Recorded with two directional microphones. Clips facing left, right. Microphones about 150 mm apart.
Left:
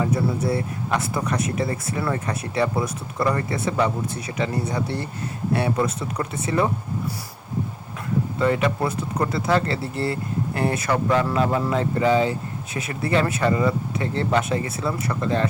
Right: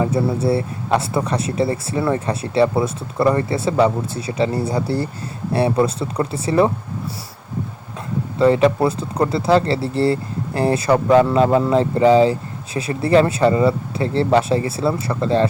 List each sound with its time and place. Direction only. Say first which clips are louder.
0.0 s speech: right 4 dB; 30° right (ahead or behind)
8.4 s speech: right 8 dB; 30° right (ahead or behind)